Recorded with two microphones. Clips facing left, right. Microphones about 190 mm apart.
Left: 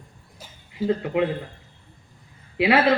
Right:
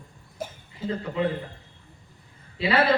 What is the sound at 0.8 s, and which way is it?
Speech, 65° left (ahead or behind).